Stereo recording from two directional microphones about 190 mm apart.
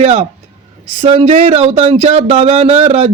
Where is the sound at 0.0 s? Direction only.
30° right (ahead or behind).